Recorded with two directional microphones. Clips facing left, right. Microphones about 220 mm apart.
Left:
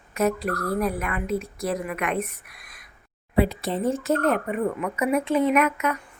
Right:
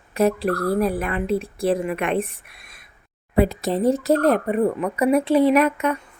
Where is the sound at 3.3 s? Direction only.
45° right (ahead or behind).